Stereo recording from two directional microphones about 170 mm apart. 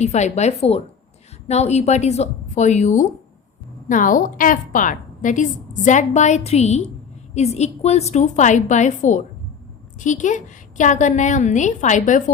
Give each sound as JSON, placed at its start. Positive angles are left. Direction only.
{"t": 0.0, "sound": "a woman's voice", "side_deg": 40}